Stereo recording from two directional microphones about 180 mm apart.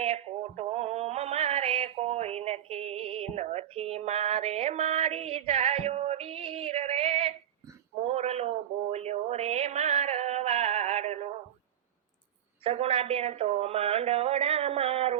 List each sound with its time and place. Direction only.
0.0 s music: 35° right (ahead or behind)
8.0 s a sound: 35° right (ahead or behind)
12.6 s speech: 35° right (ahead or behind)